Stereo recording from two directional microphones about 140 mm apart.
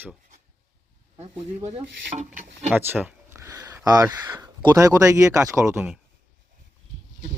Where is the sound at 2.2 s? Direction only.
55° right (ahead or behind).